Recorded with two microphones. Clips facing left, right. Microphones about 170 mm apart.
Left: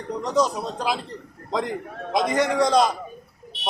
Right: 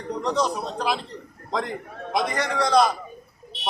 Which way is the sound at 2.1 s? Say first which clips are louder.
Left 4 dB; 15° left (ahead or behind).